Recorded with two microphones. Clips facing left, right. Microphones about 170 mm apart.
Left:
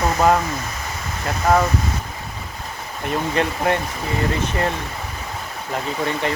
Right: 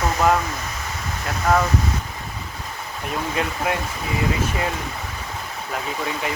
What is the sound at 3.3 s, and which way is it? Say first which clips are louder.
Speech: left 4 dB; 5° right (ahead or behind).